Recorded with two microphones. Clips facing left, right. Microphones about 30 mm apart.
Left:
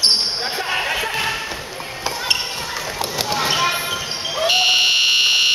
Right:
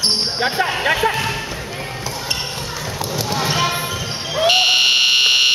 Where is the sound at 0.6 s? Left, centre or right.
Right.